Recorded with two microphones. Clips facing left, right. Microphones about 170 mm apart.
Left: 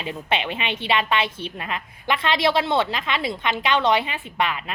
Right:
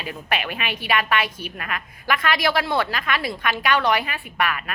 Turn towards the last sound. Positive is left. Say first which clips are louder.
# even
turn(degrees=20)  # may be behind; listen again after turning